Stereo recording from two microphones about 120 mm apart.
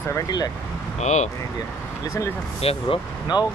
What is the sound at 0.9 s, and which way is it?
Speech, 70° left (ahead or behind).